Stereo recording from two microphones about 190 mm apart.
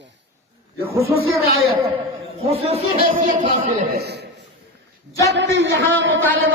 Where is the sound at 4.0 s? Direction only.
60° right (ahead or behind).